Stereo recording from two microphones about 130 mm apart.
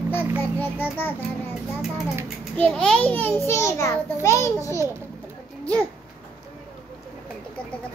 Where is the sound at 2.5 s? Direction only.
10° left (ahead or behind); by 4.7 s 25° left (ahead or behind).